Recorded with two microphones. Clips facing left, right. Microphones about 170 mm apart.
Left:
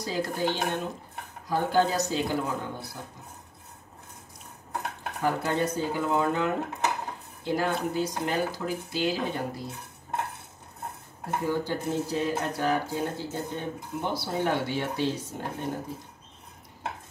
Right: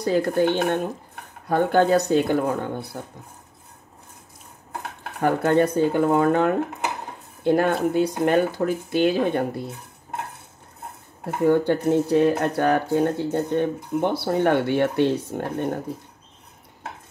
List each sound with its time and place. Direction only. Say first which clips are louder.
0.0 s speech: right 9 dB; 60° right (ahead or behind)
5.2 s speech: right 8 dB; 60° right (ahead or behind)
11.4 s speech: right 11 dB; 60° right (ahead or behind)